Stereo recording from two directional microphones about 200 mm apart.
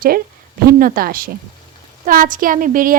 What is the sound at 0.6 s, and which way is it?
A woman's voice, 45° right (ahead or behind).